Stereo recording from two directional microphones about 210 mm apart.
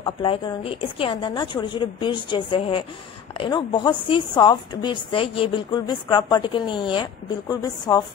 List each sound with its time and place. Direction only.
0.0 s a woman's voice: 25° left (ahead or behind)